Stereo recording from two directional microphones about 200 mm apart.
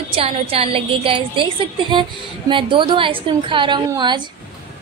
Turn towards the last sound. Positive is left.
turn(degrees=-20)  # may be behind; listen again after turning